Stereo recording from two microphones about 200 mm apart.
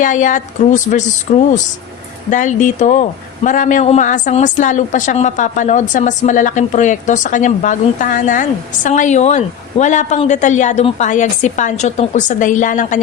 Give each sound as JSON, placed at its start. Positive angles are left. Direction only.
{"t": 0.0, "sound": "a woman's voice", "side_deg": 40}